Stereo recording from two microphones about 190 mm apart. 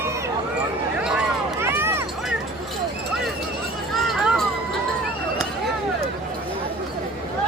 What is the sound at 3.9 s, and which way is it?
Run, centre (ahead or behind).